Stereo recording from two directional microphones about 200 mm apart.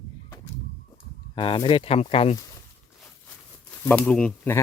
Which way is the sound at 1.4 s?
25° left (ahead or behind).